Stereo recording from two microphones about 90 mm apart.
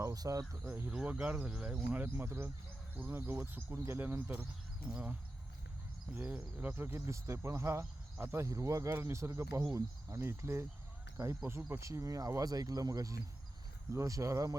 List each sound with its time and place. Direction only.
0.0 s speech: 40° right (ahead or behind)
0.6 s speech: 30° right (ahead or behind)
0.9 s speech: 10° right (ahead or behind)
6.1 s speech: 20° right (ahead or behind); by 14.5 s 35° right (ahead or behind)